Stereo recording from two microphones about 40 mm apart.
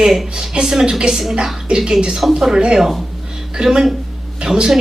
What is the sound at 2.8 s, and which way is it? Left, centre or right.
A woman's voice, centre.